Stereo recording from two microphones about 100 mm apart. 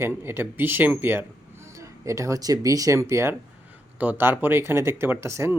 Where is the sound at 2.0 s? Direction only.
30° right (ahead or behind).